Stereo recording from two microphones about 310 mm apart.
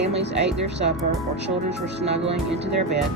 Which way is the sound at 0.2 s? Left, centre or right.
Right.